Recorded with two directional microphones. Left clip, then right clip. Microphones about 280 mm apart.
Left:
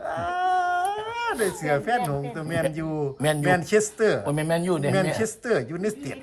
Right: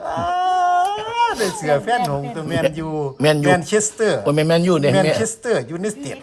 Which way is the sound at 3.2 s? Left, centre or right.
Centre.